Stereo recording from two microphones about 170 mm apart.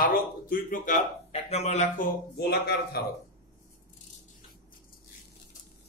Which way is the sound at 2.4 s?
65° left (ahead or behind).